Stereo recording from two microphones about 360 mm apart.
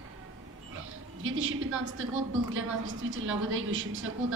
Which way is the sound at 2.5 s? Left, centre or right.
Right.